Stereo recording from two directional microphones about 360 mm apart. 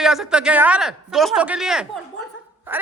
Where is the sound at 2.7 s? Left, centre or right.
Centre.